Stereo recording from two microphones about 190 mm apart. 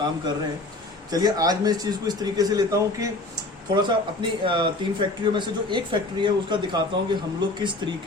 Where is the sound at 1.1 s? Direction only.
20° right (ahead or behind).